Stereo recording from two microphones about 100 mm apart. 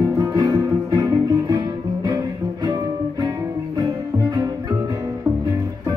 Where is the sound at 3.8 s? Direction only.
40° right (ahead or behind).